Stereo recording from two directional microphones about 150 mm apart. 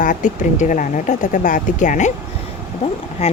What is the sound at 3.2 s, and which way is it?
Speech, 45° left (ahead or behind).